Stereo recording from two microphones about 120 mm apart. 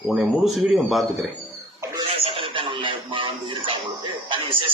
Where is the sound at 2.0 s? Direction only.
55° right (ahead or behind).